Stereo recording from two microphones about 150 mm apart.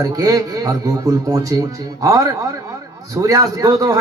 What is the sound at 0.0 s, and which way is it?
A man's voice, 25° right (ahead or behind).